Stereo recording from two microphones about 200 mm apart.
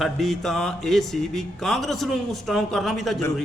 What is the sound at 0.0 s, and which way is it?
A man's voice, centre (ahead or behind).